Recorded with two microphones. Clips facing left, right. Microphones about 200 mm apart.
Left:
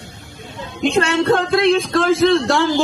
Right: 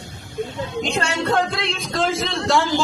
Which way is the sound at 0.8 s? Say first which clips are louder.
Left 8 dB; 55° left (ahead or behind).